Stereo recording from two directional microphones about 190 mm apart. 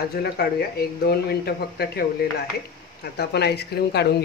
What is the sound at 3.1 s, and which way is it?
Speech, 60° left (ahead or behind).